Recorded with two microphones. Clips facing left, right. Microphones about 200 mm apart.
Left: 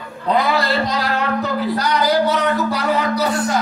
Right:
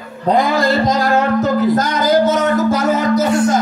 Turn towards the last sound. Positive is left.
turn(degrees=-45)  # may be behind; listen again after turning